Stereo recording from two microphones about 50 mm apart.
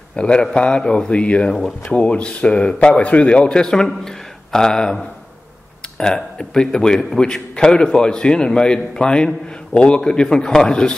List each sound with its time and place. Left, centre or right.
0.1 s a man's voice: centre